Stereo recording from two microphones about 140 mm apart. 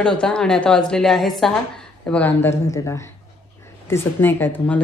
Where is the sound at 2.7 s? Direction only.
20° left (ahead or behind).